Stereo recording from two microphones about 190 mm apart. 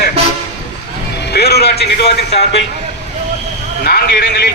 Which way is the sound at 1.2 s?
60° left (ahead or behind).